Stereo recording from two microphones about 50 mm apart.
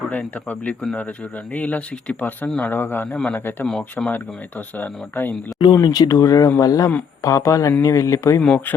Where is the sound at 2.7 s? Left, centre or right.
Left.